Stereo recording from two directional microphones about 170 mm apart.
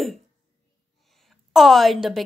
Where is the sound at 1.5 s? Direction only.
Centre (ahead or behind).